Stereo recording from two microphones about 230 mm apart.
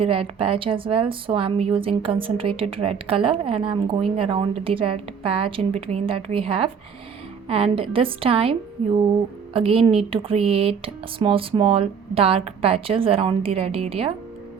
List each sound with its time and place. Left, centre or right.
0.0 s speech: right